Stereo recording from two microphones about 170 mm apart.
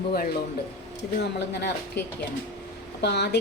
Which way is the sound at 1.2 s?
90° left.